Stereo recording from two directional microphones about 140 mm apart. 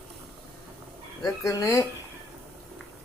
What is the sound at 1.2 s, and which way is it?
Speech, 25° left (ahead or behind).